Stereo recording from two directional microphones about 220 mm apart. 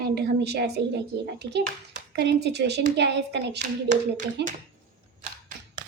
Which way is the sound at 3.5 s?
35° right (ahead or behind).